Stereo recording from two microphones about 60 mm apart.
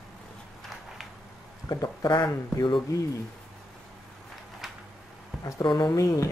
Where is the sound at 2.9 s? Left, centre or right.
Left.